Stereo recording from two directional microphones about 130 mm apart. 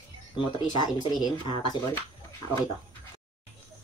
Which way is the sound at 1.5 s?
40° left (ahead or behind).